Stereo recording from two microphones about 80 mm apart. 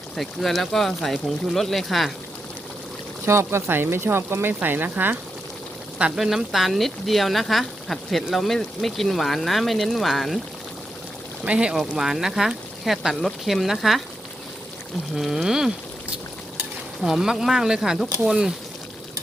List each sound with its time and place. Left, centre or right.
0.2 s speech: centre
3.2 s speech: right
6.0 s speech: centre
11.4 s speech: centre
15.1 s speech: centre
15.4 s a sound: centre
17.0 s speech: centre